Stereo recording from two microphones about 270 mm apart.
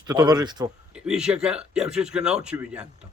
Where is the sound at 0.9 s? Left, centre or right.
Centre.